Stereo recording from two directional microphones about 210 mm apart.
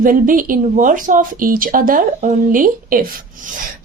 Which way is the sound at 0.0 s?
40° right (ahead or behind).